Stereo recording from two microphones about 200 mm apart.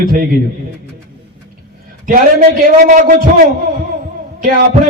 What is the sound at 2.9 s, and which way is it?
Speech, 40° right (ahead or behind).